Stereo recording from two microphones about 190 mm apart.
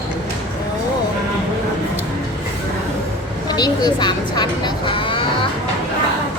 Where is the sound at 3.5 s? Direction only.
20° left (ahead or behind).